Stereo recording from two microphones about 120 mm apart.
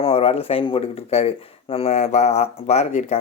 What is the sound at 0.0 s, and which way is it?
Speech, 55° left (ahead or behind).